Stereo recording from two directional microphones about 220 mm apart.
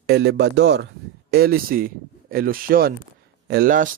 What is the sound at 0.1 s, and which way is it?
Speech, 50° right (ahead or behind).